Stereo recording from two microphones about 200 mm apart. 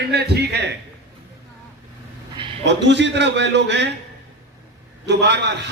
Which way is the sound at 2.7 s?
60° right (ahead or behind).